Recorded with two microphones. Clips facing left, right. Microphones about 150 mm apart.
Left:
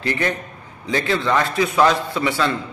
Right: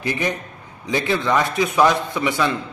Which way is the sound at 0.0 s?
15° right (ahead or behind).